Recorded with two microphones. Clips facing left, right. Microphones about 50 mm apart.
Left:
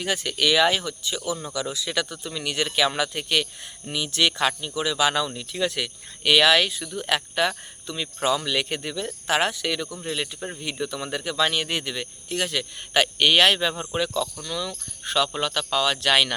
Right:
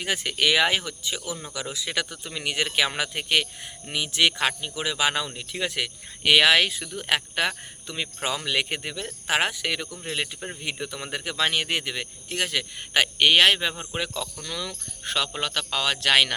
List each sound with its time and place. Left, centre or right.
0.0 s speech: right